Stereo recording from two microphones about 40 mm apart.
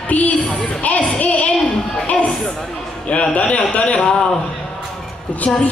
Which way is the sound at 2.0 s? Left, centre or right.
Left.